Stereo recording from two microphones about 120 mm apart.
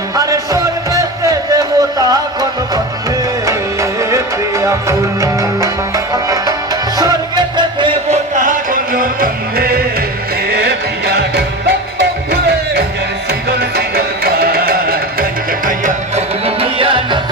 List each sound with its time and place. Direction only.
0.2 s music: 30° right (ahead or behind)
8.1 s music: 90° right
15.8 s music: 90° right
16.6 s tabla: 50° right (ahead or behind)